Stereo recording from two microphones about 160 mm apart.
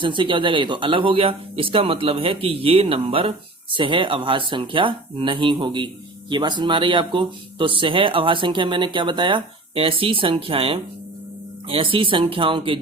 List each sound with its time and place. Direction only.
0.0 s speech: 30° right (ahead or behind)